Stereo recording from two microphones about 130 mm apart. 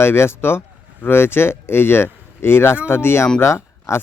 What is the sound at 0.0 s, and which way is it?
Speech, 20° left (ahead or behind).